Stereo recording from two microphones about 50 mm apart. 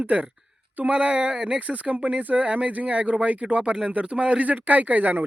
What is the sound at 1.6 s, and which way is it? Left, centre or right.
Speech, right.